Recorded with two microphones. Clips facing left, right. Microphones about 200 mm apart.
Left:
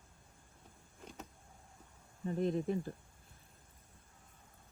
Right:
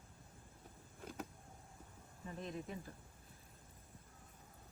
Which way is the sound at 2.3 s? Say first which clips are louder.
Left 12 dB; 35° left (ahead or behind).